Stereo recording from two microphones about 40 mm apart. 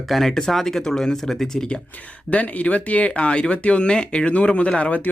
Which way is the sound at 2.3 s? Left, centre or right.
Left.